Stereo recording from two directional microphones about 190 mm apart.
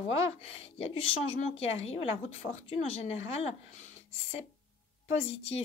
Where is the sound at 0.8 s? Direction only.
30° left (ahead or behind).